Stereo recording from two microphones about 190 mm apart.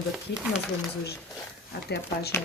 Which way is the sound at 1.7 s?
55° left (ahead or behind).